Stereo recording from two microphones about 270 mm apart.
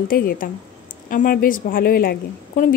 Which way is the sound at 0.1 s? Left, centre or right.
Left.